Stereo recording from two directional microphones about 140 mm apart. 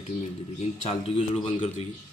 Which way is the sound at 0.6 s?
45° left (ahead or behind).